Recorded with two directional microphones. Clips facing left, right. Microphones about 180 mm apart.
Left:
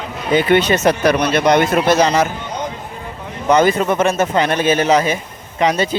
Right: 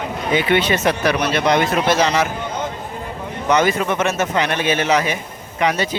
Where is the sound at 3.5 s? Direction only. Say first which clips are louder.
Left 4 dB; 35° left (ahead or behind).